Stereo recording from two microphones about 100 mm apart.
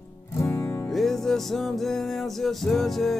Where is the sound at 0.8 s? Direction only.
Centre (ahead or behind).